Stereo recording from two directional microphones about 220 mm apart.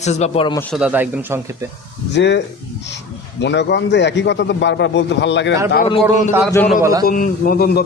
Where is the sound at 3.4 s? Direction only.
50° left (ahead or behind).